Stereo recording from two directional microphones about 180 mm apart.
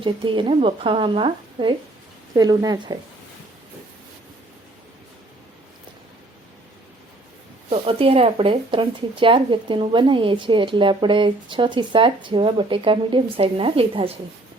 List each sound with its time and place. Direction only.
0.0 s speech: 30° right (ahead or behind)
7.7 s speech: 30° right (ahead or behind)